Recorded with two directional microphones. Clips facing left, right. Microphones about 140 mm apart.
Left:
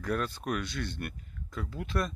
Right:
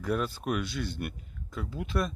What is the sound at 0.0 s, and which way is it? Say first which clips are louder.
Speech: right 2 dB; 5° right (ahead or behind).